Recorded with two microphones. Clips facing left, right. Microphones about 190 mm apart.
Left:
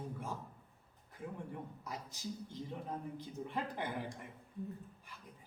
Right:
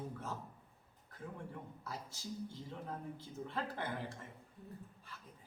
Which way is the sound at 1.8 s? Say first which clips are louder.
Left 2 dB; 15° left (ahead or behind).